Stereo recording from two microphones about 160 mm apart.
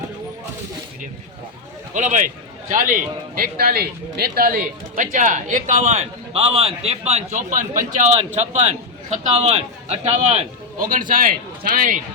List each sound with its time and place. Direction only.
1.9 s a man's voice: 50° right (ahead or behind)